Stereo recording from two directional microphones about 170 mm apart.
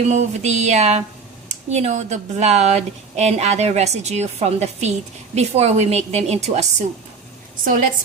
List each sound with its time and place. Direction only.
0.1 s speech: 40° right (ahead or behind)
7.6 s a woman's voice: 55° right (ahead or behind)